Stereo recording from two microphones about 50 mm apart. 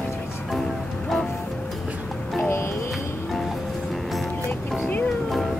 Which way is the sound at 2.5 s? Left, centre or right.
Left.